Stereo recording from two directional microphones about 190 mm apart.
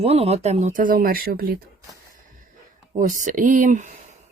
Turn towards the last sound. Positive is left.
turn(degrees=-40)  # may be behind; listen again after turning